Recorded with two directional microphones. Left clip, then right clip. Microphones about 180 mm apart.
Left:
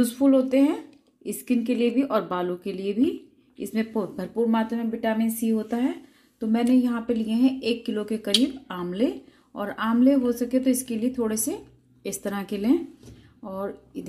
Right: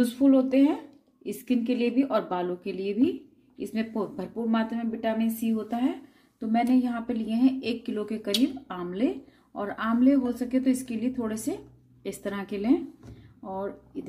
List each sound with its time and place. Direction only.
0.0 s speech: 35° left (ahead or behind)